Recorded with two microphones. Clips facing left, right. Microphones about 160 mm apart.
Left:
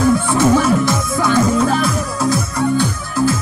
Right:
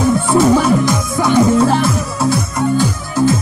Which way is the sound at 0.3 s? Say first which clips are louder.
Right 2 dB; 15° right (ahead or behind).